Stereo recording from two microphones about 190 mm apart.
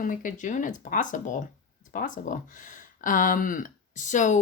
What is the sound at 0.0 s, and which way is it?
Speech, 45° left (ahead or behind).